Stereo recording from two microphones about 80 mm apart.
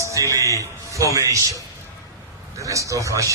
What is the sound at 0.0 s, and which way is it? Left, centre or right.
A man's voice, right.